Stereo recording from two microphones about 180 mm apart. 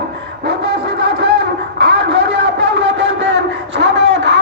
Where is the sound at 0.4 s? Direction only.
70° right (ahead or behind).